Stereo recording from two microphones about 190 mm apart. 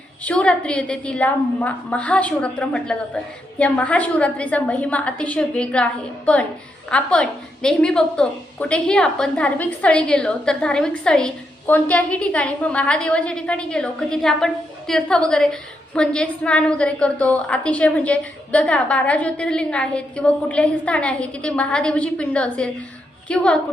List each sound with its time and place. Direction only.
0.3 s a woman's voice: 5° left (ahead or behind)